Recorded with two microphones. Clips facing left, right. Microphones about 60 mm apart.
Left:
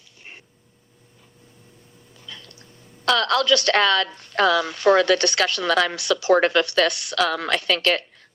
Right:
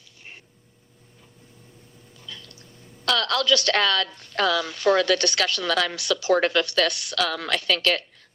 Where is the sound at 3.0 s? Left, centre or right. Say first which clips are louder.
Left 4 dB; left.